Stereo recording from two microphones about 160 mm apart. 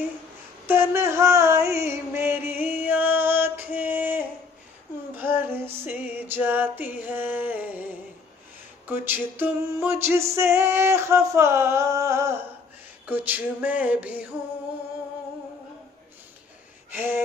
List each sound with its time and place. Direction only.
0.7 s a sound: 15° right (ahead or behind)
5.3 s music: 15° right (ahead or behind)
8.8 s music: 10° right (ahead or behind)
16.9 s music: 10° right (ahead or behind)